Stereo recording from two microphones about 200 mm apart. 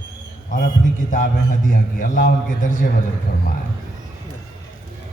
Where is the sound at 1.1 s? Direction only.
40° left (ahead or behind).